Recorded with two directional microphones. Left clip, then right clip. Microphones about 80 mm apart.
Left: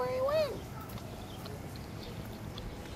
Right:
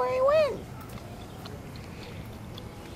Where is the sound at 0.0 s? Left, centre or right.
Right.